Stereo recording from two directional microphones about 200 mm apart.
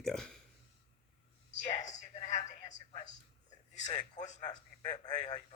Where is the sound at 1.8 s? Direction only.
20° left (ahead or behind).